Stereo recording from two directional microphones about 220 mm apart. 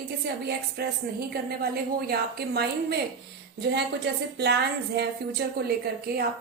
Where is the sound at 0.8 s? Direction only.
45° right (ahead or behind).